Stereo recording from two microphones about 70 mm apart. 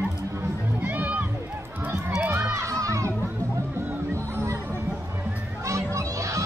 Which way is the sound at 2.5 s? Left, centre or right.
Right.